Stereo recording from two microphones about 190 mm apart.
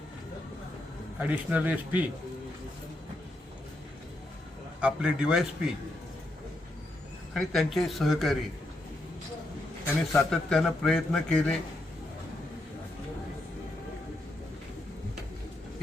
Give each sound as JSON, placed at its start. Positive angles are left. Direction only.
{"t": 1.2, "sound": "speech", "side_deg": -5}
{"t": 4.8, "sound": "a man's voice", "side_deg": -5}
{"t": 7.3, "sound": "a man's voice", "side_deg": 0}
{"t": 10.2, "sound": "a man's voice", "side_deg": 0}